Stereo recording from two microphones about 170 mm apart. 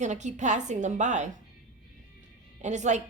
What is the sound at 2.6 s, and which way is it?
Speech, 45° right (ahead or behind).